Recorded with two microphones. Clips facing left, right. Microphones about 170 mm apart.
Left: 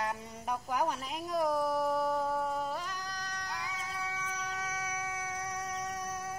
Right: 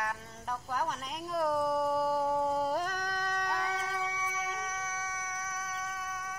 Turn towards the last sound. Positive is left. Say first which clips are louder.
# left 2 dB
turn(degrees=40)  # may be behind; listen again after turning